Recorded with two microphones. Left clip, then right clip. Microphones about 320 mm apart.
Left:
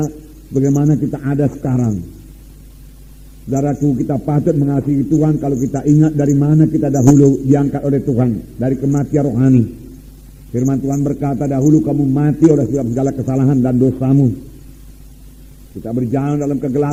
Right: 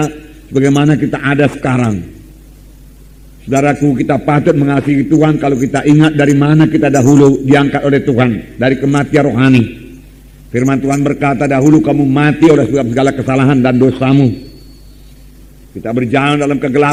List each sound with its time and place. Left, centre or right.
0.5 s a man's voice: right
3.5 s a man's voice: right
15.8 s a man's voice: right